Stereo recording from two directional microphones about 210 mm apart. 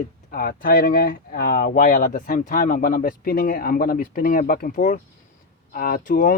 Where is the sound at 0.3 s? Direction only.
45° left (ahead or behind).